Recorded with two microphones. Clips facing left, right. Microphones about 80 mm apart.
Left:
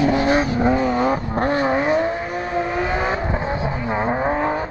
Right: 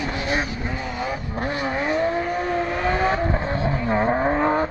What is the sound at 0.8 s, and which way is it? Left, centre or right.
Vehicle, left.